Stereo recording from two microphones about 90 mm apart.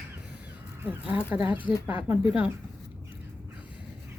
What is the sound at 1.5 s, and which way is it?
Speech, 65° left (ahead or behind).